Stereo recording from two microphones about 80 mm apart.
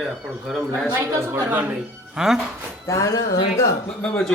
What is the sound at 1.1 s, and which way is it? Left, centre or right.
Speech, right.